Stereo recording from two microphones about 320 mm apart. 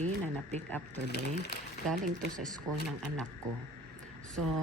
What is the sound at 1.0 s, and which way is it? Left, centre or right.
Speech, left.